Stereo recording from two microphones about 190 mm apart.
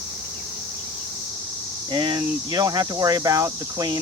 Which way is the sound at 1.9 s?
20° right (ahead or behind).